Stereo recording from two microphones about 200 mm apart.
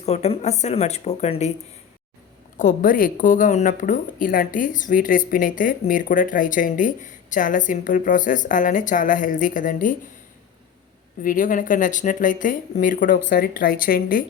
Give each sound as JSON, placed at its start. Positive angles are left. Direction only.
{"t": 0.0, "sound": "speech", "side_deg": 35}
{"t": 2.6, "sound": "speech", "side_deg": 40}
{"t": 11.2, "sound": "speech", "side_deg": 40}